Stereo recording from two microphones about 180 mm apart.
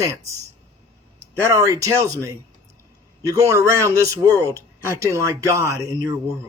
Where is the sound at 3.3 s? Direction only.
20° right (ahead or behind).